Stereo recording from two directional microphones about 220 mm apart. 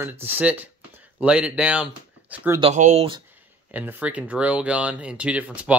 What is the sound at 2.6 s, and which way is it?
Speech, 30° right (ahead or behind).